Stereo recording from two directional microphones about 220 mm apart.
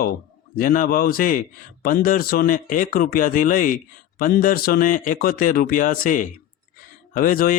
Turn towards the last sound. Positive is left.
turn(degrees=40)  # may be behind; listen again after turning